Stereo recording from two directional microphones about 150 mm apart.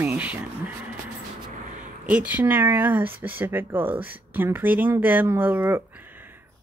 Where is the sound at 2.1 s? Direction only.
10° right (ahead or behind).